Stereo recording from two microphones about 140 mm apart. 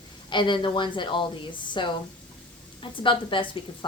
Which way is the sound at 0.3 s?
35° left (ahead or behind).